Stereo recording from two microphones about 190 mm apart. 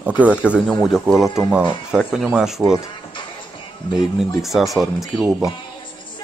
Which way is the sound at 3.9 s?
Centre (ahead or behind).